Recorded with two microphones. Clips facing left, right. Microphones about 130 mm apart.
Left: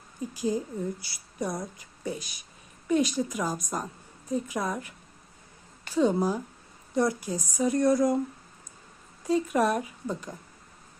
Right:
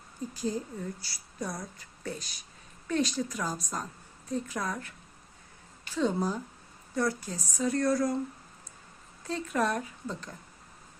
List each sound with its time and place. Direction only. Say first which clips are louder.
0.3 s speech: left 5 dB; 15° left (ahead or behind)
9.2 s speech: left 5 dB; 10° left (ahead or behind)